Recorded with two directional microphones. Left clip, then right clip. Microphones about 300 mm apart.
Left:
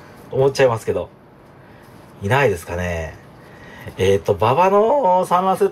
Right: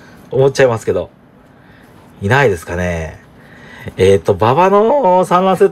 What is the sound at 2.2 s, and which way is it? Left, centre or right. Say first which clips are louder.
Speech: right 5 dB; centre.